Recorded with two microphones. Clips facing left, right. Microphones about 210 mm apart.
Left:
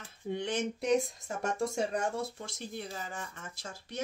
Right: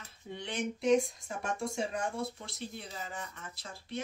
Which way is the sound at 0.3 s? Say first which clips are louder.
Left 4 dB; 45° left (ahead or behind).